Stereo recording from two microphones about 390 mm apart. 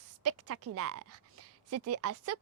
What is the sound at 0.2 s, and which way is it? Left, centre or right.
A woman's voice, right.